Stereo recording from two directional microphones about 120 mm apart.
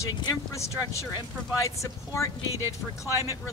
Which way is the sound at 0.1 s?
35° left (ahead or behind).